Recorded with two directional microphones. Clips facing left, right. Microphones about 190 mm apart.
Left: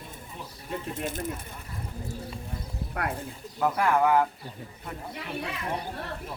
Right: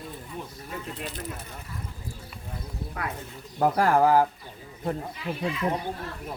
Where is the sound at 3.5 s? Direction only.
35° right (ahead or behind).